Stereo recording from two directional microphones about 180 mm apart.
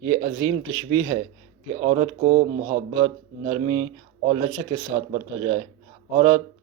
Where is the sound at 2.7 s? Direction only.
25° right (ahead or behind).